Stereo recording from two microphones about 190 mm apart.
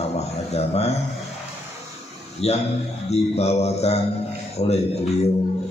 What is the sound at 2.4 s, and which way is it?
Speech, 35° left (ahead or behind).